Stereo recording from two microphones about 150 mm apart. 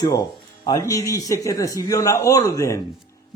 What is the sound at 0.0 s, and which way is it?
Speech, 30° left (ahead or behind).